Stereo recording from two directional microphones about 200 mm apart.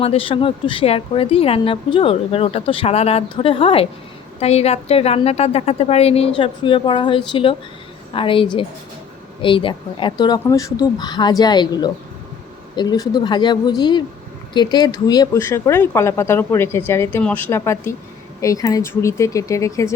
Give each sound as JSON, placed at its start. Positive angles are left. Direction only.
{"t": 0.0, "sound": "a woman's voice", "side_deg": 30}